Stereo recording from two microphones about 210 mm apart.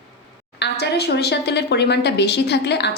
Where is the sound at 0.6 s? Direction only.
55° left (ahead or behind).